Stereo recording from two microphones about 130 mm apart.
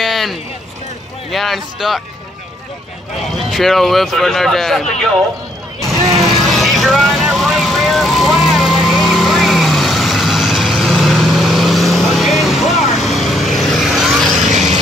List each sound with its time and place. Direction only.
0.0 s run: centre (ahead or behind)
1.3 s speech: centre (ahead or behind)
3.3 s speech: centre (ahead or behind)
5.8 s vehicle: centre (ahead or behind)
14.5 s vehicle: 65° right (ahead or behind)